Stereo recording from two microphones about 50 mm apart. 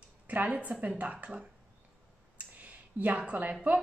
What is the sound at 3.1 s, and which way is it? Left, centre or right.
Speech, right.